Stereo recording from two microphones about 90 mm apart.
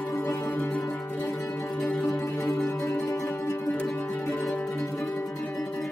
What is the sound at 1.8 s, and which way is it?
Music, 15° left (ahead or behind).